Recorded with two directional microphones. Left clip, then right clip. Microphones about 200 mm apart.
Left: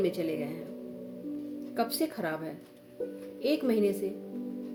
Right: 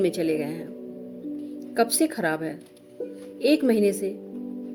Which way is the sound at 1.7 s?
55° right (ahead or behind).